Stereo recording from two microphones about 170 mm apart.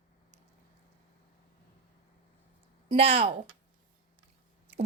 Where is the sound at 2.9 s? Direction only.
35° right (ahead or behind).